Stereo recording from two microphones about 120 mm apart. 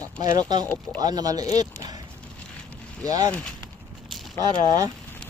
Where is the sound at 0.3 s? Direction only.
35° right (ahead or behind).